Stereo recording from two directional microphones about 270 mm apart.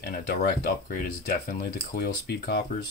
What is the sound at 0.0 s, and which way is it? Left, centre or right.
Speech, left.